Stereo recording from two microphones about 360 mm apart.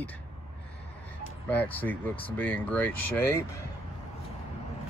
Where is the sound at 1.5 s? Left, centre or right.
Centre.